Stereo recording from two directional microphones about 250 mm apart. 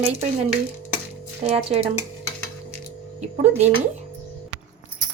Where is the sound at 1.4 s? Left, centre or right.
Right.